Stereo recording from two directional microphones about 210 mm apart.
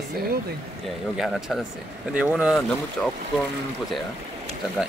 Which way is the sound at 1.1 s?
Centre (ahead or behind).